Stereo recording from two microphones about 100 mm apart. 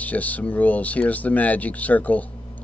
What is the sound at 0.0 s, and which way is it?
Speech, 15° left (ahead or behind).